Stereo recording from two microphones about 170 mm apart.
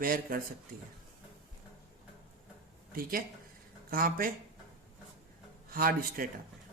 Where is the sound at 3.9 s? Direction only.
55° right (ahead or behind).